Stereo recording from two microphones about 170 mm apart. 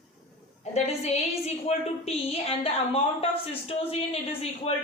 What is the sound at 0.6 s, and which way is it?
A woman's voice, 40° left (ahead or behind).